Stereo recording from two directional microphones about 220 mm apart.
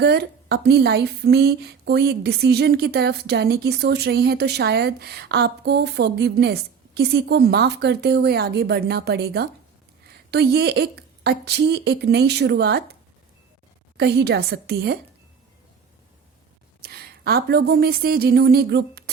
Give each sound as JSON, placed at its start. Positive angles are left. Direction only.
{"t": 0.0, "sound": "a woman's voice", "side_deg": -50}
{"t": 13.9, "sound": "a woman's voice", "side_deg": -50}
{"t": 16.8, "sound": "a woman's voice", "side_deg": -45}